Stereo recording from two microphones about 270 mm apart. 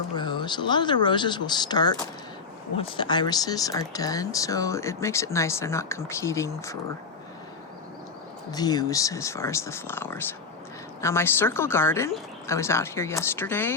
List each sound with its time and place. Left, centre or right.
0.2 s speech: centre
8.4 s speech: centre